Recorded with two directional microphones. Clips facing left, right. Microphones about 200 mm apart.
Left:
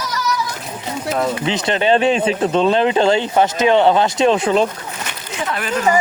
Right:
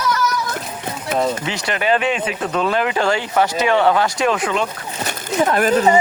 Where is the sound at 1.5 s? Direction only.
25° left (ahead or behind).